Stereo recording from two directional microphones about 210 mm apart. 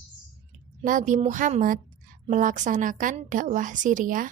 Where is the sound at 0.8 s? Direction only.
35° right (ahead or behind).